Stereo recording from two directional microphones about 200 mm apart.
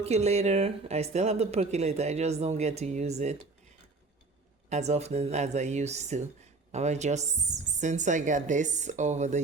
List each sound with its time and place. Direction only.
0.0 s speech: 30° right (ahead or behind)
4.7 s speech: 35° right (ahead or behind)